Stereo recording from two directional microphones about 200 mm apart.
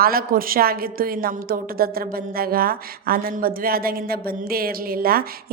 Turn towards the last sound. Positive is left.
turn(degrees=-50)  # may be behind; listen again after turning